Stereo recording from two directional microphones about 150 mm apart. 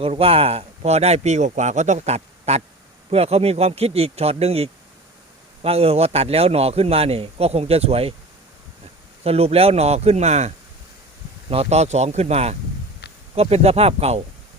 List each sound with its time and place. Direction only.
0.0 s a man's voice: 40° right (ahead or behind)
9.2 s speech: 40° right (ahead or behind)